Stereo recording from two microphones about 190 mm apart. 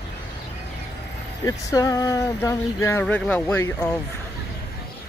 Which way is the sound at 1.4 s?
15° left (ahead or behind).